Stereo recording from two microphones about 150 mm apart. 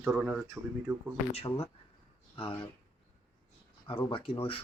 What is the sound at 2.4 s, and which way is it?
Speech, 35° left (ahead or behind).